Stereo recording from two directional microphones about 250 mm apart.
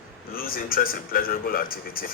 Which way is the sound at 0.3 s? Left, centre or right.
Left.